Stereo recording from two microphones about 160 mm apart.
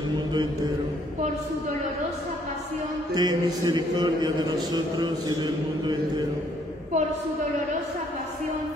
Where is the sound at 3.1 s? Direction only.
25° right (ahead or behind).